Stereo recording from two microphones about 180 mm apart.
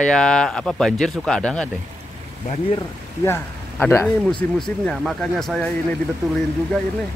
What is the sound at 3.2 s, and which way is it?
Speech, 15° left (ahead or behind).